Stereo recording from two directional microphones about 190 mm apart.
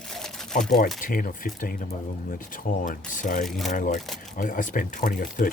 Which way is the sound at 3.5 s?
Centre (ahead or behind).